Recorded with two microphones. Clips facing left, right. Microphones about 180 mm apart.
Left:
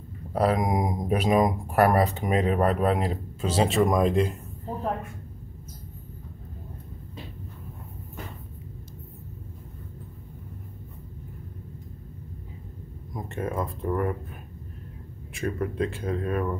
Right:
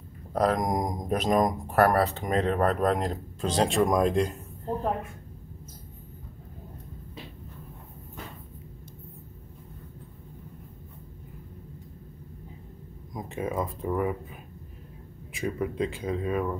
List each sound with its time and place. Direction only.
0.3 s speech: 5° left (ahead or behind)
13.1 s speech: centre (ahead or behind)